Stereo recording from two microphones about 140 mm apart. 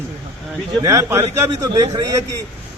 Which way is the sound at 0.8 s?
20° right (ahead or behind).